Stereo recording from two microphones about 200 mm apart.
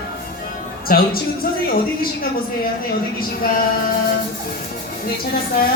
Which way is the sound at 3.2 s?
45° left (ahead or behind).